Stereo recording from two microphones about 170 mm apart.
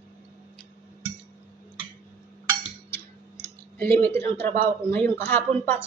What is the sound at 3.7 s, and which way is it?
A woman's voice, 10° left (ahead or behind).